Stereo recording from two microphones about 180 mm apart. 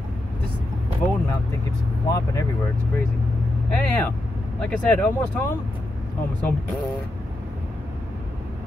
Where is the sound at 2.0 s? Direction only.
20° left (ahead or behind).